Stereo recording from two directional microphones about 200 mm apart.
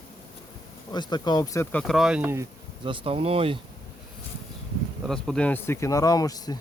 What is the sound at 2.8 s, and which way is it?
Speech, 30° right (ahead or behind).